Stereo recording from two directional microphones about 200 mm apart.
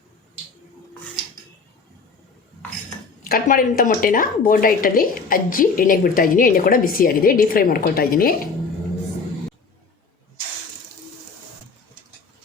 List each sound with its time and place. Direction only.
3.2 s a woman's voice: 45° left (ahead or behind)